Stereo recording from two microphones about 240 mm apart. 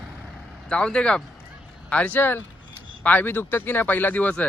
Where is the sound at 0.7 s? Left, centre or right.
Centre.